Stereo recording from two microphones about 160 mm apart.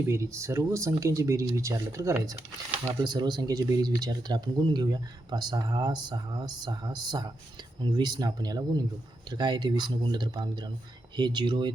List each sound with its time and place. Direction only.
0.1 s speech: 20° right (ahead or behind)